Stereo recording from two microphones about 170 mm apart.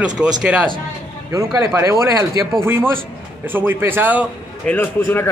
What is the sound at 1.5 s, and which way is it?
Speech, 15° right (ahead or behind).